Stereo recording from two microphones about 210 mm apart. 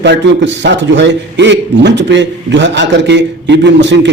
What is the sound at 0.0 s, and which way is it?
A man's voice, 55° right (ahead or behind).